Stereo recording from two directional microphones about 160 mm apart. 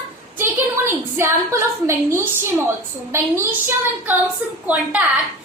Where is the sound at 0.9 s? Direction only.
15° right (ahead or behind).